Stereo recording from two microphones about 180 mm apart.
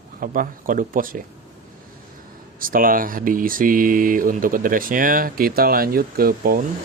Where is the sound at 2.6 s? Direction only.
50° right (ahead or behind).